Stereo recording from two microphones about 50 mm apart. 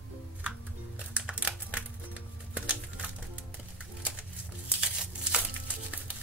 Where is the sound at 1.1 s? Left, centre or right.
Right.